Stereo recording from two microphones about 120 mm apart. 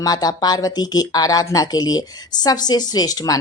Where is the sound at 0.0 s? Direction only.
35° left (ahead or behind).